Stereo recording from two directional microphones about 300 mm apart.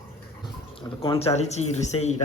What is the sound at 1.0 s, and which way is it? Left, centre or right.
Speech, centre.